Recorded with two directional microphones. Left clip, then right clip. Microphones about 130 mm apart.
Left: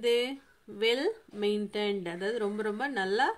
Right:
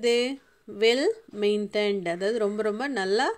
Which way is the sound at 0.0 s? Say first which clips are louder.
Right 4 dB; 45° right (ahead or behind).